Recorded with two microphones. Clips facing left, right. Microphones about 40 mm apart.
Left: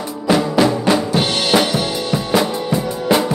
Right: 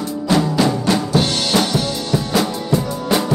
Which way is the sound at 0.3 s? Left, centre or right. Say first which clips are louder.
Left 2 dB; centre.